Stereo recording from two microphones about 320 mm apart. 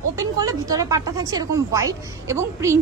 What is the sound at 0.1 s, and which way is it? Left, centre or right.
Speech, centre.